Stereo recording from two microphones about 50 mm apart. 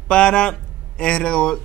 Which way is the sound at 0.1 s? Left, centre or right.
Centre.